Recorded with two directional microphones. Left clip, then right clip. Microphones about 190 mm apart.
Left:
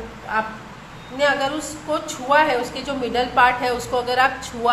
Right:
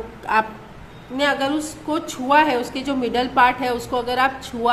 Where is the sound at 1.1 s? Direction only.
25° right (ahead or behind).